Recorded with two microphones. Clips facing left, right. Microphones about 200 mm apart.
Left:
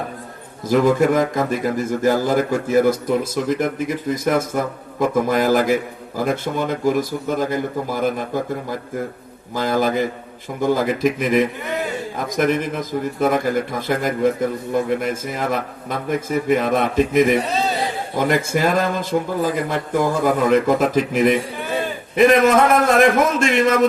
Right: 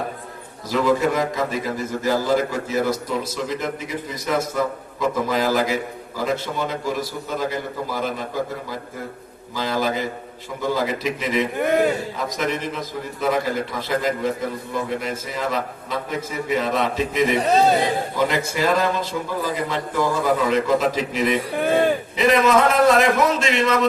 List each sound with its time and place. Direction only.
0.7 s a man's voice: 50° left (ahead or behind)
9.6 s a man's voice: 50° left (ahead or behind)
11.5 s a man's voice: 50° right (ahead or behind)
12.1 s a man's voice: 50° left (ahead or behind)
21.6 s a sound: 55° right (ahead or behind)
22.1 s a man's voice: 50° left (ahead or behind)